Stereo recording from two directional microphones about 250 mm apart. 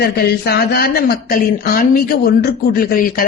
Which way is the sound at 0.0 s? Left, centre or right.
Left.